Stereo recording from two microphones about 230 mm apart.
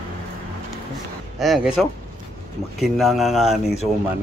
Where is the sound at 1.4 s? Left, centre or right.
Centre.